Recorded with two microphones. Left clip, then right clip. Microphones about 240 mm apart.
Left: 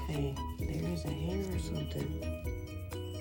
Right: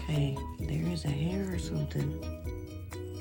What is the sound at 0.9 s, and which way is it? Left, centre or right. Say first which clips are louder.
Music: right 2 dB; right.